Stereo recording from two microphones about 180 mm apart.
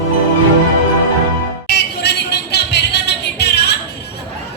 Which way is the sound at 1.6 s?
65° left (ahead or behind).